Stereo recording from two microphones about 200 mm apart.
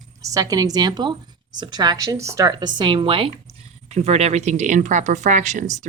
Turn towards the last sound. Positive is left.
turn(degrees=-35)  # may be behind; listen again after turning